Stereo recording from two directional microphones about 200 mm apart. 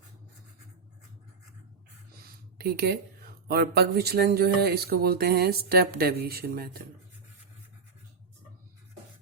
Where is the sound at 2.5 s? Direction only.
50° right (ahead or behind).